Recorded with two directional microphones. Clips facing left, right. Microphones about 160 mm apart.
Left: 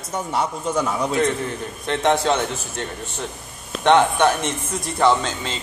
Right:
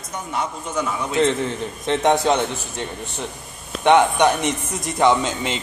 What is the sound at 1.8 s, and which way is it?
A man's voice, 20° right (ahead or behind).